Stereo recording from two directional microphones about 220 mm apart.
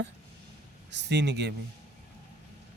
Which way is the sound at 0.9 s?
50° right (ahead or behind).